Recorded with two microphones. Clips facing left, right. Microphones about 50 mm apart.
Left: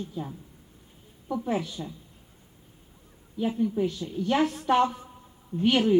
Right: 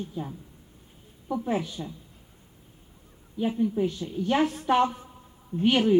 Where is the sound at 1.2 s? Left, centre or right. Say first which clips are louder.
Right 1 dB; centre.